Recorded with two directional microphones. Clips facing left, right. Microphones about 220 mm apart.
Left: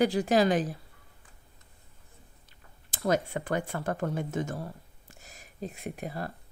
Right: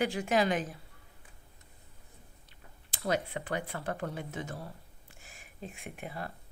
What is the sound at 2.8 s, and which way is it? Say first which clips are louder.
A woman's voice: left 5 dB; 45° left (ahead or behind).